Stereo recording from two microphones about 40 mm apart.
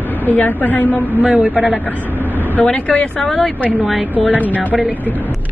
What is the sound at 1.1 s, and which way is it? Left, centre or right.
Speech, right.